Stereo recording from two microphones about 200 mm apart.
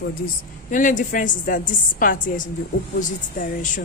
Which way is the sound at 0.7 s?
40° left (ahead or behind).